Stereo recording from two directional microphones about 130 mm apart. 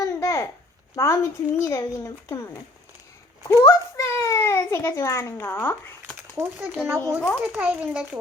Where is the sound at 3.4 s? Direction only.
30° left (ahead or behind).